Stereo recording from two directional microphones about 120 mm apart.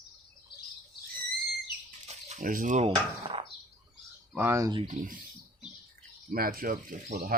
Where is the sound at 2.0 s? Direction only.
65° right (ahead or behind); by 2.9 s 90° right.